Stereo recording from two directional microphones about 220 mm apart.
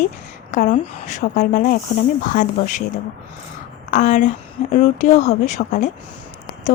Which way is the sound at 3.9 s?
35° left (ahead or behind).